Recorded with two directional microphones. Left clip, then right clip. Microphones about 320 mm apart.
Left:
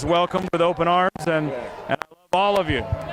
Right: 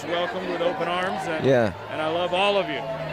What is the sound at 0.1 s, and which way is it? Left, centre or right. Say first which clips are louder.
Speech: left 6 dB; left.